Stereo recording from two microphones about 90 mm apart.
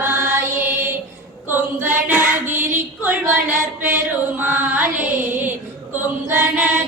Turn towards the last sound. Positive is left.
turn(degrees=-20)  # may be behind; listen again after turning